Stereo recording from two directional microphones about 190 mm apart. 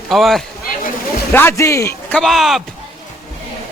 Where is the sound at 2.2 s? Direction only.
Centre (ahead or behind).